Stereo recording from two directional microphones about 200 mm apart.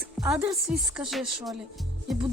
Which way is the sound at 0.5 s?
Centre (ahead or behind).